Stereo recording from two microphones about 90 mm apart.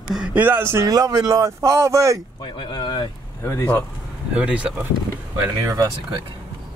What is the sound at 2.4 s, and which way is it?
Speech, 65° left (ahead or behind).